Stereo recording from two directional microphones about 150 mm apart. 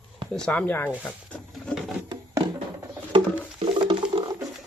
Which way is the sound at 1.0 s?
10° left (ahead or behind).